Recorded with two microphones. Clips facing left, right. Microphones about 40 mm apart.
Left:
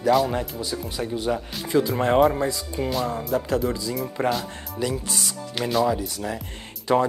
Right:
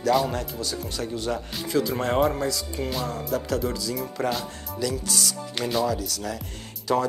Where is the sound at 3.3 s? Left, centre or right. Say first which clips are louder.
Left 3 dB; left.